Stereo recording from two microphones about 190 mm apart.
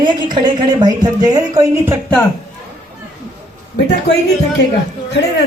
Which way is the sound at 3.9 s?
60° left (ahead or behind).